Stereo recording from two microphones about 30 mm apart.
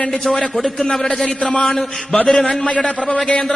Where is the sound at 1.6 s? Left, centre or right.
Centre.